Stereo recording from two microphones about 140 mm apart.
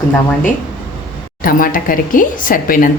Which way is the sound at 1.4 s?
90° left.